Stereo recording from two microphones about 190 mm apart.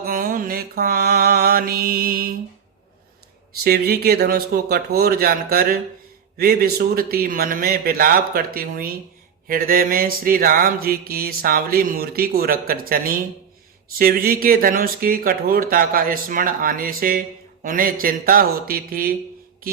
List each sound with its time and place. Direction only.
0.0 s mantra: 45° right (ahead or behind)
3.6 s mantra: 55° right (ahead or behind)
14.0 s mantra: 50° right (ahead or behind)
19.6 s music: 50° right (ahead or behind)